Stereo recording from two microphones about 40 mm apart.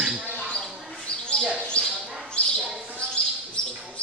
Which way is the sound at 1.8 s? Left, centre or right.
Left.